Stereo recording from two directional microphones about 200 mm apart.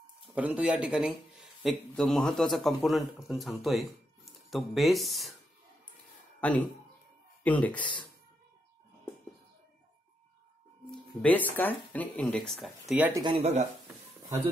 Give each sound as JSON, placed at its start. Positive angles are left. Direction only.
{"t": 0.3, "sound": "a man's voice", "side_deg": -5}
{"t": 7.4, "sound": "speech", "side_deg": 5}
{"t": 7.8, "sound": "speech", "side_deg": 25}
{"t": 11.2, "sound": "speech", "side_deg": 10}
{"t": 13.2, "sound": "speech", "side_deg": -25}
{"t": 14.2, "sound": "speech", "side_deg": -10}